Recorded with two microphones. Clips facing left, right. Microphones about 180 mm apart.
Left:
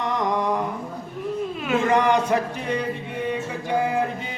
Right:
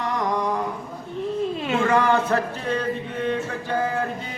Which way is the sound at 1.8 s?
20° left (ahead or behind).